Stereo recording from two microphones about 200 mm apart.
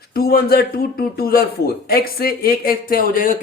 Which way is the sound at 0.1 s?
50° left (ahead or behind).